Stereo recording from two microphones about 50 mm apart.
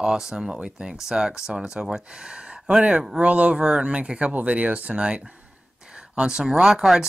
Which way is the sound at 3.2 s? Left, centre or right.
Right.